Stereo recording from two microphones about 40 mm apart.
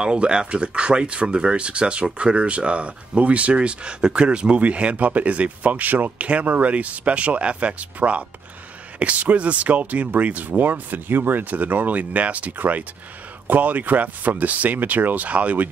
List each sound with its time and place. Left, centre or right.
0.0 s speech: right
11.5 s speech: right
12.0 s speech: right
12.5 s speech: right